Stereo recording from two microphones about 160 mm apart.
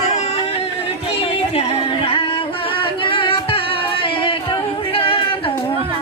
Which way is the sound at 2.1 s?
35° left (ahead or behind).